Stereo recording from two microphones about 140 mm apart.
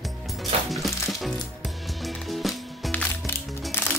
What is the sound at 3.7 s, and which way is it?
Music, 15° left (ahead or behind).